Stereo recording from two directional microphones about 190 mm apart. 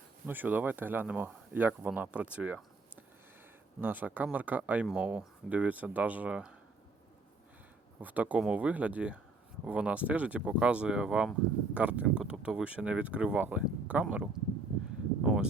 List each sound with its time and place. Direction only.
0.3 s speech: 10° right (ahead or behind)
8.0 s speech: 10° right (ahead or behind)
15.2 s a sound: 5° right (ahead or behind)